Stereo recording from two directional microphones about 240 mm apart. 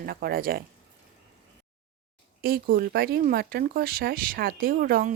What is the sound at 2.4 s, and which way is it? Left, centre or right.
Speech, right.